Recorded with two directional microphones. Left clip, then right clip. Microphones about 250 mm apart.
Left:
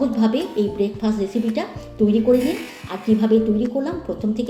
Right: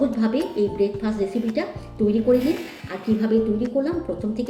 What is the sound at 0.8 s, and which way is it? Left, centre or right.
Speech, left.